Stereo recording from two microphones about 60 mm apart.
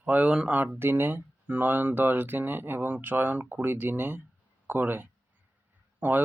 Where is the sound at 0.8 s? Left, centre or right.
Right.